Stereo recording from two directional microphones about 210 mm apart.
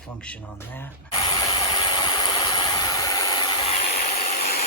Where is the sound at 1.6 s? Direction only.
25° left (ahead or behind).